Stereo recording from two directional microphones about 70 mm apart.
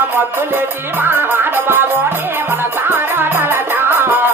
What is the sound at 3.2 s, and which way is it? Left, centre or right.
Music, right.